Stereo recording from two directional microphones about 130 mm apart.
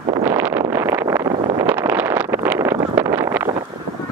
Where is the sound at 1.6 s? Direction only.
15° right (ahead or behind).